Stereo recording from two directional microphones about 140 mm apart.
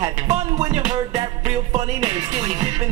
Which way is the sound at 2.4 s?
30° right (ahead or behind).